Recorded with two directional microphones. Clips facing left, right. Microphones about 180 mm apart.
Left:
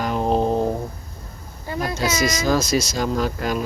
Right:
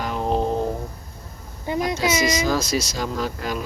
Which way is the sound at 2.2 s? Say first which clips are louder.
Left 1 dB; 45° left (ahead or behind).